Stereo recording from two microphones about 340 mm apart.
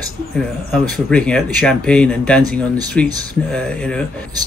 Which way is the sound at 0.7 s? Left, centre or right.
Centre.